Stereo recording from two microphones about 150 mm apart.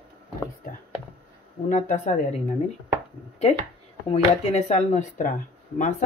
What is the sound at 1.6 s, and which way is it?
Speech, 55° left (ahead or behind).